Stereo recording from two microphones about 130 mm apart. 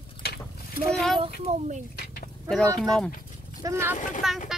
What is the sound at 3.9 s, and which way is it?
Speech, 75° left (ahead or behind).